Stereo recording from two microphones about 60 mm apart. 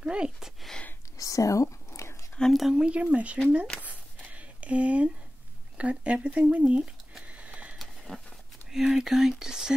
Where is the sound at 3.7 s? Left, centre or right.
Right.